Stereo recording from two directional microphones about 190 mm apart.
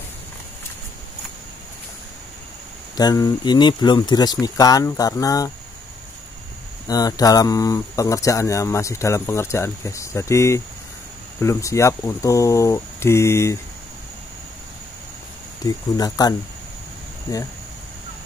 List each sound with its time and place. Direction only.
3.0 s speech: 20° left (ahead or behind)
6.9 s speech: 20° left (ahead or behind)
15.6 s speech: 20° left (ahead or behind)